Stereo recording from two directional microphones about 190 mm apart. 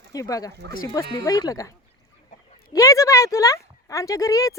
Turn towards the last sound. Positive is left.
turn(degrees=15)  # may be behind; listen again after turning